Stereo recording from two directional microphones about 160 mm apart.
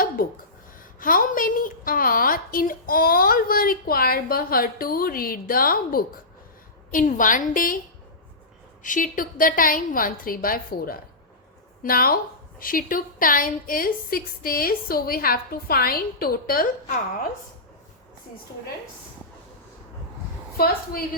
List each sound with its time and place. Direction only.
0.9 s a woman's voice: 60° left (ahead or behind)
8.8 s a woman's voice: 55° left (ahead or behind)
20.6 s a woman's voice: 70° left (ahead or behind)